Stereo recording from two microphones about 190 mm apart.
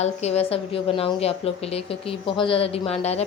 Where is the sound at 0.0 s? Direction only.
35° left (ahead or behind).